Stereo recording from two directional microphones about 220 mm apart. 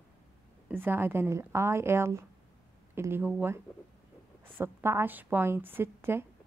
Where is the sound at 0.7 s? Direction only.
10° right (ahead or behind).